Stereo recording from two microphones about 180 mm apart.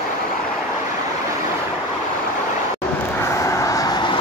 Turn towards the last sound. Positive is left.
turn(degrees=25)  # may be behind; listen again after turning